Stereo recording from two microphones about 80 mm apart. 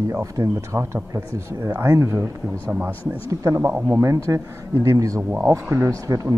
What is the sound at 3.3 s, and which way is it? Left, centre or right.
Speech, right.